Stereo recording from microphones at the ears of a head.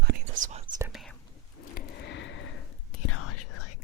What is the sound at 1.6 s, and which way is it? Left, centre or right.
Whispering, left.